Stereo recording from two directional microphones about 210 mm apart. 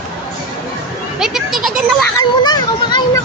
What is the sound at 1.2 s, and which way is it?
Speech, centre (ahead or behind).